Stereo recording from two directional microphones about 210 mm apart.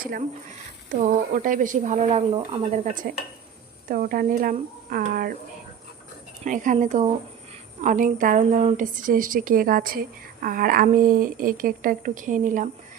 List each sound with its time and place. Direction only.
0.0 s a woman's voice: 45° right (ahead or behind)
6.4 s a woman's voice: 35° right (ahead or behind)